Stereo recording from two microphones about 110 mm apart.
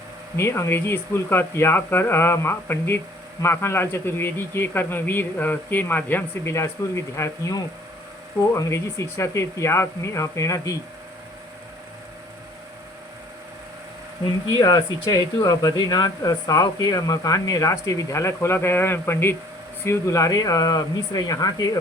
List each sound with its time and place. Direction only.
0.3 s speech: 25° left (ahead or behind)
14.6 s speech: 35° left (ahead or behind)